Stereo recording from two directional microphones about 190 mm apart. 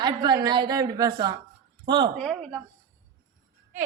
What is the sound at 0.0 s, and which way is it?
A woman's voice, 25° right (ahead or behind).